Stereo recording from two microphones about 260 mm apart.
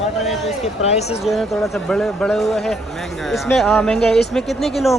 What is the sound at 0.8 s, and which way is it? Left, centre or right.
Speech, left.